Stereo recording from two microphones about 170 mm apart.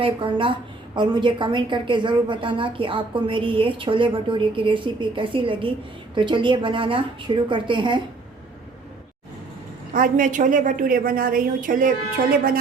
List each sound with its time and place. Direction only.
0.0 s a woman's voice: 30° right (ahead or behind)
9.9 s a woman's voice: 55° right (ahead or behind)